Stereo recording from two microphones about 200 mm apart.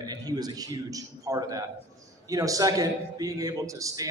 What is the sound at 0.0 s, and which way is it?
A man's voice, 20° right (ahead or behind).